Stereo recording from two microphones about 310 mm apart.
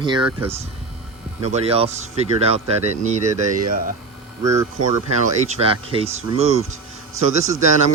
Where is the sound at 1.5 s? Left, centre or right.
Centre.